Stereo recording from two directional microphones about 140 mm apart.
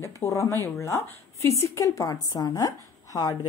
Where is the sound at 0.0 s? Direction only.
20° left (ahead or behind).